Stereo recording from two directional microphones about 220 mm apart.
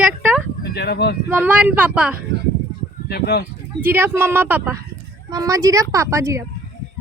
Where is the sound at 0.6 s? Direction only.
45° left (ahead or behind).